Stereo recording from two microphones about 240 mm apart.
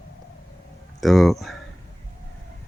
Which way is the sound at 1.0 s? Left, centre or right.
Centre.